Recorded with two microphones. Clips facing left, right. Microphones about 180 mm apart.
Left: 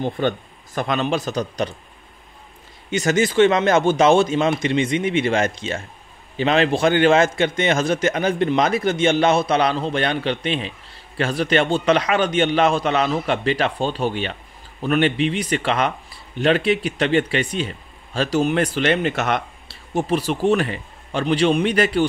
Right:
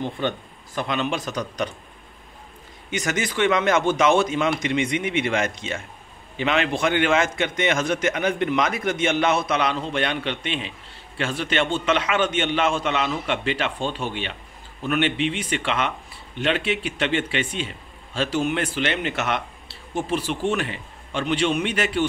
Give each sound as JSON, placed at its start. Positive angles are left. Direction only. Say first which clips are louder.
{"t": 0.7, "sound": "a man's voice", "louder": "left 4 dB", "side_deg": 40}
{"t": 2.9, "sound": "a man's voice", "louder": "left 7 dB", "side_deg": 30}